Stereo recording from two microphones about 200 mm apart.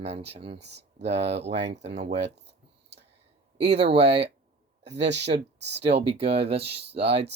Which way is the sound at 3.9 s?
30° right (ahead or behind).